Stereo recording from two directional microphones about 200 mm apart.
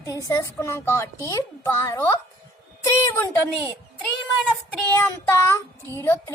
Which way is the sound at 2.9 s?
15° left (ahead or behind).